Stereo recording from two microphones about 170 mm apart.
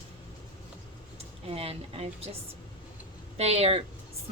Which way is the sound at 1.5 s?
35° right (ahead or behind).